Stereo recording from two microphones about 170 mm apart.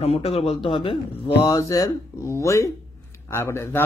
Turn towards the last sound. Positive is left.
turn(degrees=15)  # may be behind; listen again after turning